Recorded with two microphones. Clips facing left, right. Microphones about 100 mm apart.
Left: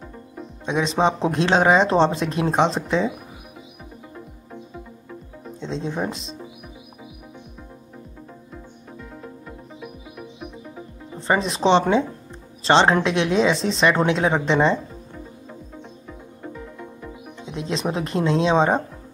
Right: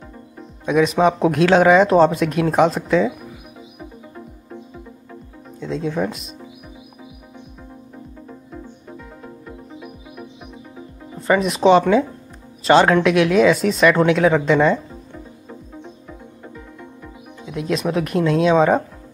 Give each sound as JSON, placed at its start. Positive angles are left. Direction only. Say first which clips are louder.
{"t": 0.7, "sound": "speech", "louder": "right 5 dB", "side_deg": 25}
{"t": 5.6, "sound": "speech", "louder": "right 4 dB", "side_deg": 25}
{"t": 11.1, "sound": "speech", "louder": "right 4 dB", "side_deg": 30}
{"t": 17.5, "sound": "speech", "louder": "right 4 dB", "side_deg": 25}